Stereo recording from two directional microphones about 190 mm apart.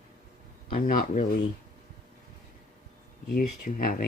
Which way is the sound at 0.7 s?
50° left (ahead or behind).